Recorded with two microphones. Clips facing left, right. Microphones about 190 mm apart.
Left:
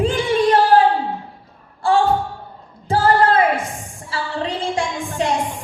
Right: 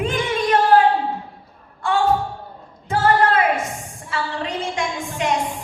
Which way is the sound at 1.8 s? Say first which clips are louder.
Left 2 dB; 30° left (ahead or behind).